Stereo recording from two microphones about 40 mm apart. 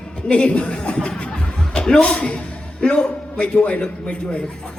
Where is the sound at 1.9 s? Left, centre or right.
Left.